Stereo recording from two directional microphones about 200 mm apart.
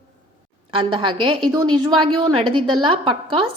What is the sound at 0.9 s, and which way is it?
A woman's voice, 25° right (ahead or behind).